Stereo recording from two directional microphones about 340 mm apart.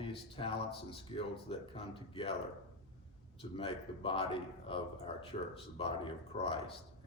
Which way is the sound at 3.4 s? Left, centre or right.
Centre.